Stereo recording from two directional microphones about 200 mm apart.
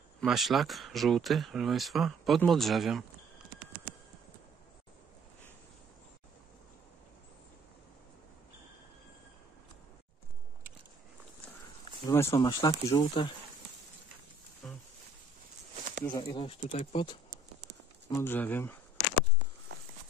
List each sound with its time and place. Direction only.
0.2 s speech: centre (ahead or behind)
12.1 s speech: 10° left (ahead or behind); by 13.3 s 30° left (ahead or behind)
14.6 s a sound: 5° left (ahead or behind)
15.7 s a sound: 35° right (ahead or behind)
16.1 s speech: 20° left (ahead or behind)
18.1 s speech: 10° left (ahead or behind)
19.7 s walk: 55° right (ahead or behind)